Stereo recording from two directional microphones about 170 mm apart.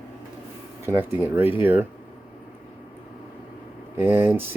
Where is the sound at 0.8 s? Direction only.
15° right (ahead or behind).